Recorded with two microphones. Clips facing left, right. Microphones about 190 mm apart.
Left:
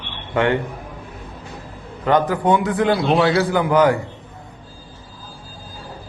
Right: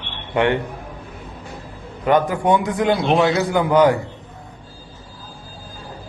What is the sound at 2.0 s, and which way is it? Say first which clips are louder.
A man's voice: even; 15° right (ahead or behind).